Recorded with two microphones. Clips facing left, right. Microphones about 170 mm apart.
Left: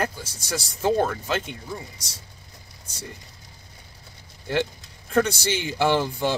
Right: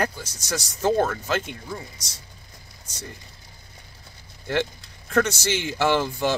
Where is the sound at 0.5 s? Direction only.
10° left (ahead or behind).